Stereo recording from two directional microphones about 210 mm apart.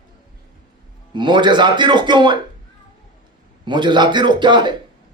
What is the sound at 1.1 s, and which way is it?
Speech, 20° right (ahead or behind).